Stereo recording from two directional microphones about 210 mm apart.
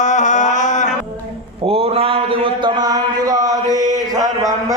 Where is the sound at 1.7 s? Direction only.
25° right (ahead or behind).